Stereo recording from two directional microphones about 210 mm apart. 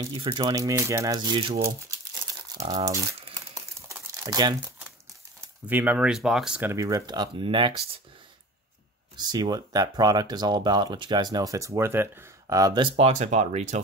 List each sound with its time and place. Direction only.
0.0 s speech: 20° right (ahead or behind)
3.9 s crumpling: 15° right (ahead or behind)
5.7 s speech: 10° right (ahead or behind); by 8.0 s 25° right (ahead or behind)
9.1 s speech: 20° right (ahead or behind)